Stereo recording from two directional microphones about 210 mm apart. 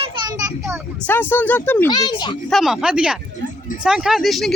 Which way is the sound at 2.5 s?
Centre (ahead or behind).